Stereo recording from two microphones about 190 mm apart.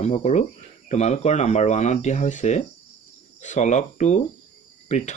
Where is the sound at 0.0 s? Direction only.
35° left (ahead or behind).